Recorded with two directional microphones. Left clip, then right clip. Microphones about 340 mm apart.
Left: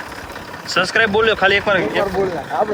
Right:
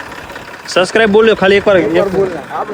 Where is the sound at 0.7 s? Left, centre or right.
Centre.